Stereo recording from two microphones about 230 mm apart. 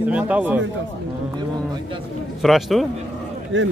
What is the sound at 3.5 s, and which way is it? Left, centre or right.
Speech, right.